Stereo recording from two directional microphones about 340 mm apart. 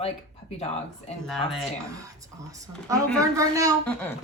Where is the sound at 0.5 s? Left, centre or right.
Centre.